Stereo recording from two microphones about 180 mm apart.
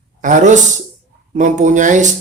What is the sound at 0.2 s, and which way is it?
A woman's voice, 45° right (ahead or behind).